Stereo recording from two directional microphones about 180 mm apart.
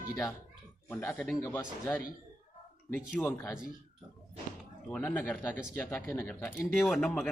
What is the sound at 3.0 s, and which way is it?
Speech, centre (ahead or behind).